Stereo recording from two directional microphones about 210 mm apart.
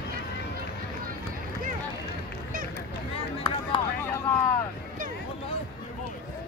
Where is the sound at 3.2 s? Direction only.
20° left (ahead or behind).